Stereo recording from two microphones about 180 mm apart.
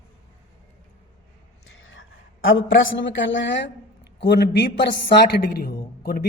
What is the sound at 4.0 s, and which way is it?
A man's voice, 70° left (ahead or behind).